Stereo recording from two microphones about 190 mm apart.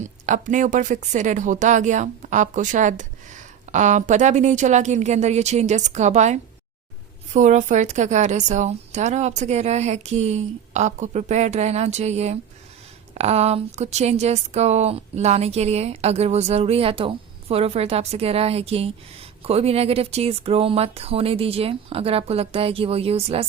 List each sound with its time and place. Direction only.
0.0 s speech: 40° right (ahead or behind)